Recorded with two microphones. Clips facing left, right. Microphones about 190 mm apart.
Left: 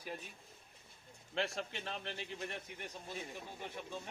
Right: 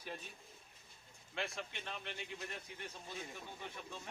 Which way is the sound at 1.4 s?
35° left (ahead or behind).